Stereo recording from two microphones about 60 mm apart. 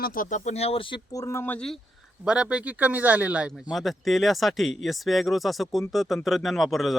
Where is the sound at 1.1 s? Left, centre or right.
Left.